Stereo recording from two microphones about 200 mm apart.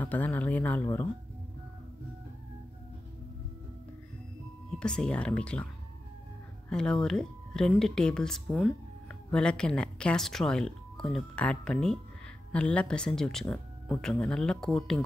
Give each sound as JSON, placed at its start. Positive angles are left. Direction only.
{"t": 0.0, "sound": "speech", "side_deg": 10}
{"t": 4.6, "sound": "speech", "side_deg": 5}
{"t": 6.7, "sound": "speech", "side_deg": 5}